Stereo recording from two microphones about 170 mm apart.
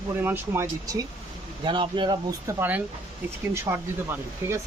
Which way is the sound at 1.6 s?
30° right (ahead or behind).